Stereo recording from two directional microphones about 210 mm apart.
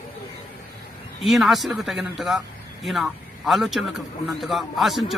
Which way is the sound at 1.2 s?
Centre (ahead or behind).